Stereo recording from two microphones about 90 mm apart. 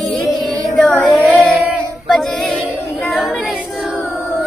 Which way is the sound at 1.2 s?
15° left (ahead or behind).